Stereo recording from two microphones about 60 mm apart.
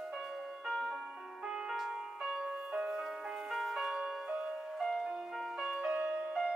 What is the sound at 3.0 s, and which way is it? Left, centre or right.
Music, centre.